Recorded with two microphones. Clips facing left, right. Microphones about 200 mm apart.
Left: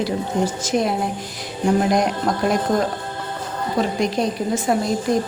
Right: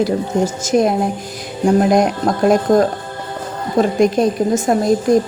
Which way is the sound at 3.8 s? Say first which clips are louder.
Right 8 dB; 50° right (ahead or behind).